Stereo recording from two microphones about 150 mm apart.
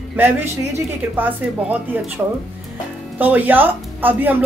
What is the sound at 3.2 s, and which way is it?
A woman's voice, 10° right (ahead or behind).